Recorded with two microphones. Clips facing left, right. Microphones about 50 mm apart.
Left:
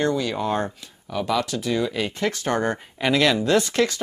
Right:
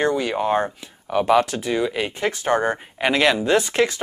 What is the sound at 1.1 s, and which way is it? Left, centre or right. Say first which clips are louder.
Speech: right 6 dB; right.